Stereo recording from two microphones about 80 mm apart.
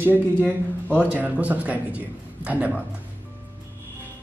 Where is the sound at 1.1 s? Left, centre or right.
Centre.